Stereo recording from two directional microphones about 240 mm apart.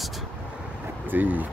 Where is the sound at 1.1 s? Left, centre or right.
Centre.